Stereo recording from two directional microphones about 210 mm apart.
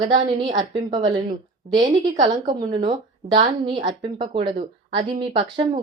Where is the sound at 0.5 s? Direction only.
35° right (ahead or behind).